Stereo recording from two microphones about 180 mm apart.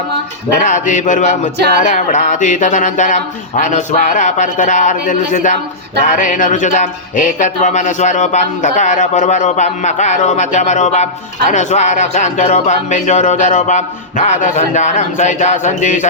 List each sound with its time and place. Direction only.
0.6 s a man's voice: 45° left (ahead or behind)